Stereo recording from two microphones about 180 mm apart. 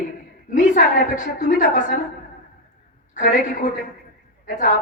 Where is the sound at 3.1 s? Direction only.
45° left (ahead or behind).